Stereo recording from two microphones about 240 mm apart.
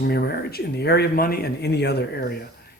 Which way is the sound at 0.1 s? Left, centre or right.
Left.